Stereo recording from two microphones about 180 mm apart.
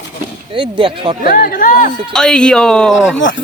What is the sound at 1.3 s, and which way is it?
Speech, 50° left (ahead or behind).